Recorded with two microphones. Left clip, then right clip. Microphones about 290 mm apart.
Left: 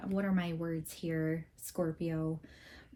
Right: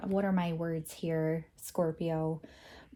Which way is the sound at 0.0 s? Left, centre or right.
Centre.